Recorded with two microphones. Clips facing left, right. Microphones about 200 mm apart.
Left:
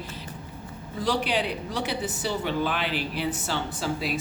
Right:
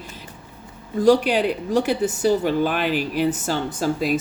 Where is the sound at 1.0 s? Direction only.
45° right (ahead or behind).